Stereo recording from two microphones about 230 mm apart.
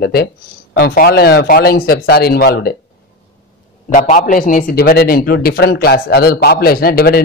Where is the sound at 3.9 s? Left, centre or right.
Left.